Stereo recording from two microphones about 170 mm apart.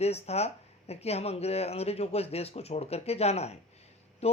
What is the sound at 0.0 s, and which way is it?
Speech, 40° left (ahead or behind).